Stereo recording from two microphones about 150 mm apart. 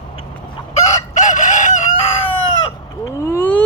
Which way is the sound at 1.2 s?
55° left (ahead or behind).